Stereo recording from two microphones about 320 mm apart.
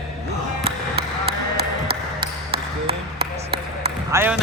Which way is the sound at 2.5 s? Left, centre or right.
Right.